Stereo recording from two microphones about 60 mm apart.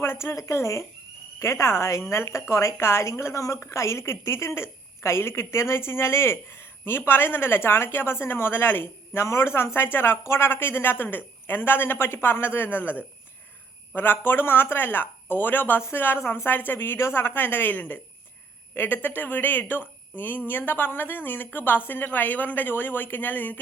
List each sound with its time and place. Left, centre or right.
0.0 s a woman's voice: left